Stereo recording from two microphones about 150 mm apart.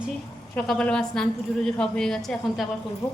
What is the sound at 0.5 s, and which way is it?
A woman's voice, 5° left (ahead or behind).